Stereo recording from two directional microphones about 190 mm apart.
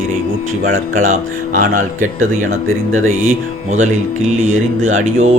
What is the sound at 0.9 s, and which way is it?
Speech, 40° right (ahead or behind).